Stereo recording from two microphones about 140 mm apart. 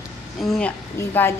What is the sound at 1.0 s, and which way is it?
Speech, 20° left (ahead or behind).